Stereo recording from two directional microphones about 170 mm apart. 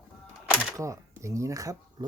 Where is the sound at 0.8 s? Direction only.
20° right (ahead or behind).